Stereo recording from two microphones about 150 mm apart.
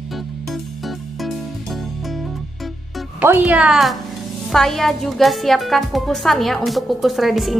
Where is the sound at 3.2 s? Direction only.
10° right (ahead or behind).